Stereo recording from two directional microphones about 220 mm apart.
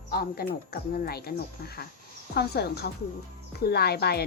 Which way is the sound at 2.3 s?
45° left (ahead or behind).